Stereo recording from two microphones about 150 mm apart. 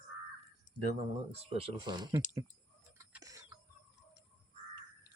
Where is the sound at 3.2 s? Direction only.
25° right (ahead or behind).